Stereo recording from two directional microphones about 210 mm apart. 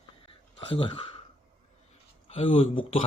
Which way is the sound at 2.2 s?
30° left (ahead or behind).